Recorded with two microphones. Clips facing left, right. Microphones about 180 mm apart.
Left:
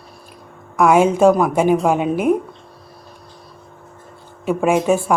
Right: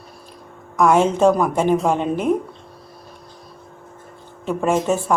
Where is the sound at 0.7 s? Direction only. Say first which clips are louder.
Left 2 dB; 10° left (ahead or behind).